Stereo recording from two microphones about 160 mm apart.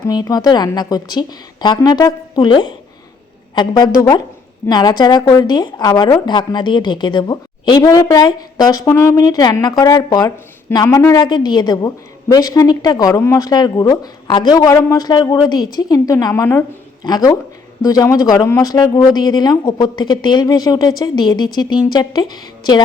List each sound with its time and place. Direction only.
0.1 s a woman's voice: 25° left (ahead or behind)